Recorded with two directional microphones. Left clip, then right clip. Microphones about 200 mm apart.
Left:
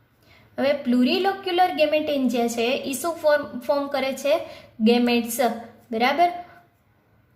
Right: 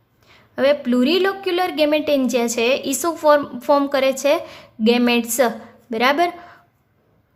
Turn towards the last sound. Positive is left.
turn(degrees=-35)  # may be behind; listen again after turning